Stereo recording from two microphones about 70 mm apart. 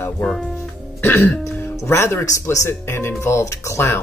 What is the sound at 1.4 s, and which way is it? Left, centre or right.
Speech, left.